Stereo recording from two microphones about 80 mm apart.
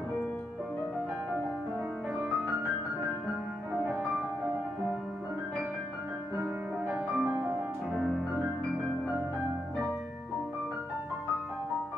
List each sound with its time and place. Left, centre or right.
6.9 s music: centre